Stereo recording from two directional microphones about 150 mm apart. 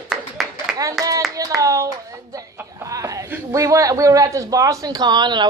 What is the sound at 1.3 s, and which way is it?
Hands, 20° right (ahead or behind).